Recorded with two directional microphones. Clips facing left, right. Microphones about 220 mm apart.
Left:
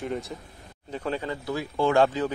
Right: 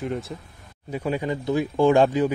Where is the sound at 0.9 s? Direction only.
10° right (ahead or behind).